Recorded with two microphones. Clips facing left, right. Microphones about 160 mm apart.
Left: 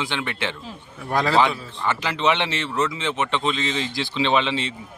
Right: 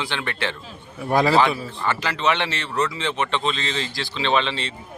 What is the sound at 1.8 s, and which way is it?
Speech, 20° left (ahead or behind).